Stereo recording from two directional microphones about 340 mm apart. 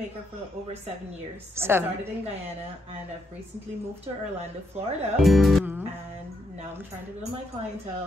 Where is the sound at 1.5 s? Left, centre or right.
Centre.